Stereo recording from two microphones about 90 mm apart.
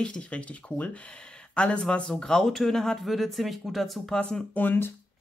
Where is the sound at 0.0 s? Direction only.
10° left (ahead or behind).